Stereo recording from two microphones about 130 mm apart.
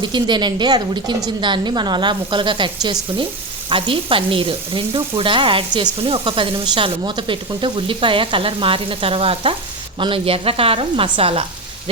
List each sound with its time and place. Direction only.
0.0 s a woman's voice: 35° right (ahead or behind)